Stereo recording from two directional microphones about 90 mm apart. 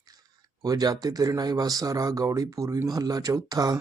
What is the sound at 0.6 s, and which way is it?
Speech, 45° right (ahead or behind).